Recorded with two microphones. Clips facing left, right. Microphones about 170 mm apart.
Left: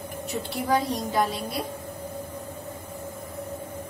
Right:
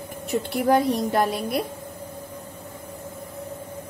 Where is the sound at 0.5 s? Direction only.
60° right (ahead or behind).